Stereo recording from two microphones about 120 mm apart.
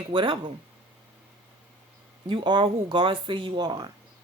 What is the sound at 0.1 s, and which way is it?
Speech, 45° right (ahead or behind).